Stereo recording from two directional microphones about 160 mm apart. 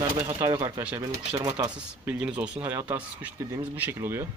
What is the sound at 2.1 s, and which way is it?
Speech, 10° right (ahead or behind).